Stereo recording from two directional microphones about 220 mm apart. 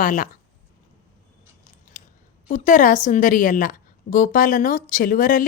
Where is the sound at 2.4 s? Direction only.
35° left (ahead or behind).